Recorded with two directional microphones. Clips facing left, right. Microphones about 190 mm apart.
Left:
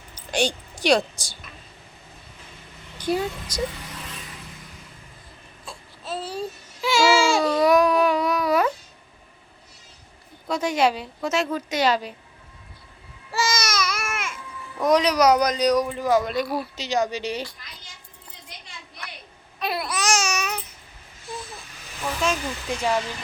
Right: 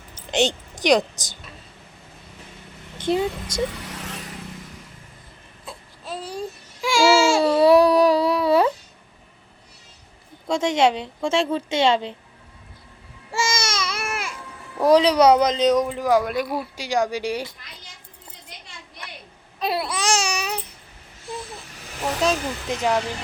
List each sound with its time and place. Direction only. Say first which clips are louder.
0.1 s a sound: right 3 dB; 25° right (ahead or behind)
3.0 s speech: right 3 dB; 25° right (ahead or behind)
5.6 s a sound: even; 15° right (ahead or behind)
7.4 s baby cry: right 6 dB; 30° right (ahead or behind)
10.5 s speech: right 3 dB; 25° right (ahead or behind)
13.3 s baby cry: even; 25° right (ahead or behind)
14.8 s speech: right 4 dB; 30° right (ahead or behind); by 17.5 s 10° right (ahead or behind)
19.5 s babbling: right 2 dB; 30° right (ahead or behind)
22.0 s a sound: right 3 dB; 35° right (ahead or behind)
22.7 s speech: right 2 dB; 20° right (ahead or behind)